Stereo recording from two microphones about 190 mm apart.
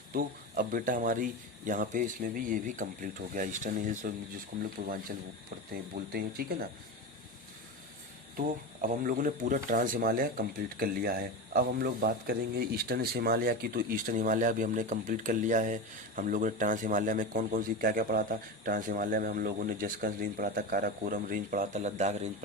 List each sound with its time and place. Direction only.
0.1 s speech: 50° right (ahead or behind)
6.1 s speech: 55° right (ahead or behind)
8.4 s speech: 45° right (ahead or behind)